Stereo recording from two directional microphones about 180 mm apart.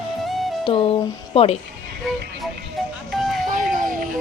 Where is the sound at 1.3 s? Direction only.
30° left (ahead or behind).